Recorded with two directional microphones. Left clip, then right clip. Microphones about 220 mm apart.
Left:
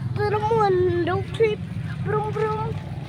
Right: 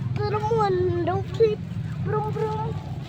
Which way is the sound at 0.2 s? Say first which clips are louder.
Left 3 dB; 20° left (ahead or behind).